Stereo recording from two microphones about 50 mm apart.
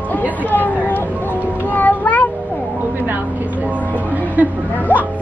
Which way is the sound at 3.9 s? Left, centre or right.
Right.